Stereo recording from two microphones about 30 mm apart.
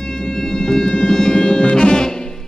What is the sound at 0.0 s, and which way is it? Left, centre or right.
Music, left.